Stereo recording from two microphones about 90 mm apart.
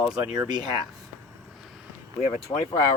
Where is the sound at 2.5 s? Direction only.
45° left (ahead or behind).